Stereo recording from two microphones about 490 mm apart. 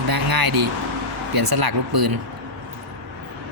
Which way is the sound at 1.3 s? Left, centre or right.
Right.